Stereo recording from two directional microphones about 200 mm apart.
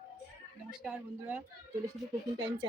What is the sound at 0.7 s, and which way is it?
Speech, 5° right (ahead or behind).